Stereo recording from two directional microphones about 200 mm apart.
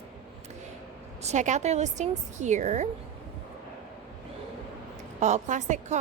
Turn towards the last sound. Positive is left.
turn(degrees=-35)  # may be behind; listen again after turning